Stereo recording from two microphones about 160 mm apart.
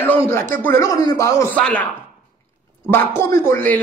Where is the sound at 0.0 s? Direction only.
15° left (ahead or behind).